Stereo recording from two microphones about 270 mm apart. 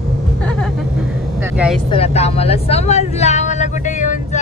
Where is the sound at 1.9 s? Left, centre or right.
Left.